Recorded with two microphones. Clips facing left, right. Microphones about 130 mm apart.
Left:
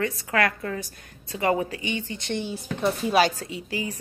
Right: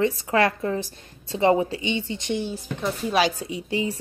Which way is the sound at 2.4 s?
10° left (ahead or behind).